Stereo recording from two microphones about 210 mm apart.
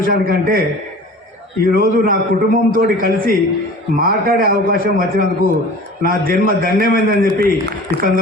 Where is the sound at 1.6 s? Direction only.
45° right (ahead or behind).